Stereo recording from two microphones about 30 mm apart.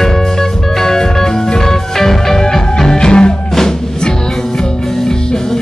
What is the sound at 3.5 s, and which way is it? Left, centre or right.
Music, centre.